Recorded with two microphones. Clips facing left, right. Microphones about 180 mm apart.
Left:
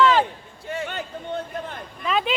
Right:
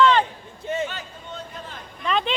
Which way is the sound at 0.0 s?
5° left (ahead or behind).